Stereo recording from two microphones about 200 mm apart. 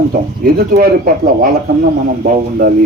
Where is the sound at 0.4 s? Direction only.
45° right (ahead or behind).